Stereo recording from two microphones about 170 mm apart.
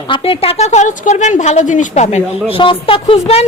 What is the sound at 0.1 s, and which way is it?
A woman's voice, 35° left (ahead or behind).